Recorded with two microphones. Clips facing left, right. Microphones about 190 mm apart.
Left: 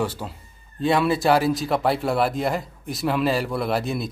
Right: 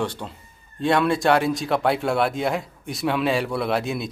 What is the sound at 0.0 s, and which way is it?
Speech, 5° left (ahead or behind).